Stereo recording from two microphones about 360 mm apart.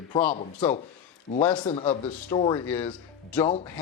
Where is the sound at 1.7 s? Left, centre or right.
Centre.